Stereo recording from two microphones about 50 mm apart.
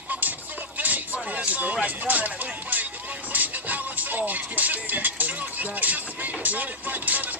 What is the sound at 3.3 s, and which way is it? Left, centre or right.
Music, right.